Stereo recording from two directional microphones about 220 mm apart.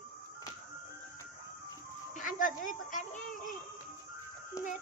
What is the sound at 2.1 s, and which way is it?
Speech, 35° left (ahead or behind).